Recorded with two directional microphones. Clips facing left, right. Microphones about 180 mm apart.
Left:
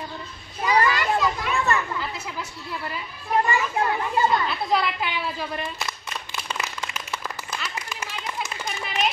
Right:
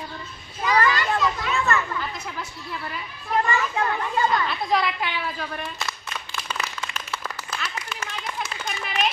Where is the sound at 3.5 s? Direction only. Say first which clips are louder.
Left 1 dB; 15° left (ahead or behind).